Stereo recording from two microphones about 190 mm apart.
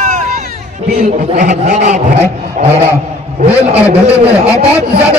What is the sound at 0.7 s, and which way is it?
A man's voice, 40° right (ahead or behind).